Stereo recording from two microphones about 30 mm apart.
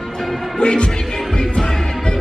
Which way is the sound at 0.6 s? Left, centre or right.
Left.